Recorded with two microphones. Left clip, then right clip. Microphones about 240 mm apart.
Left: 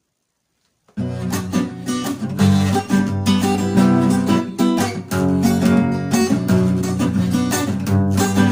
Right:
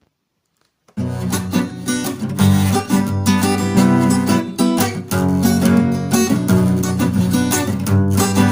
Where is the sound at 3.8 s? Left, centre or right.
Right.